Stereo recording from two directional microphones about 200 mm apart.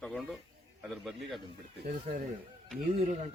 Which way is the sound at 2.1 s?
35° right (ahead or behind).